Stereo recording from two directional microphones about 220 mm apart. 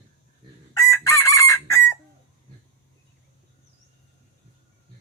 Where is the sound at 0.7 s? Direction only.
15° left (ahead or behind).